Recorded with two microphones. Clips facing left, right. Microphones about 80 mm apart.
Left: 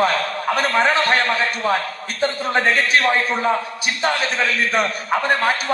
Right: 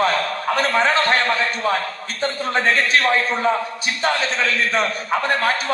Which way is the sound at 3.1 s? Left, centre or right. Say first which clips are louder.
Even; centre.